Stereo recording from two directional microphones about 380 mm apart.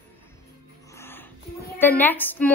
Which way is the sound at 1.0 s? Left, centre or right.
Centre.